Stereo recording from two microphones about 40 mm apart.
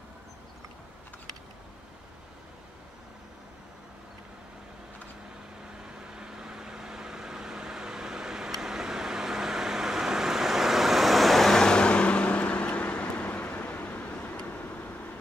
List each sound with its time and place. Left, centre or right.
6.1 s vehicle: centre; by 14.2 s left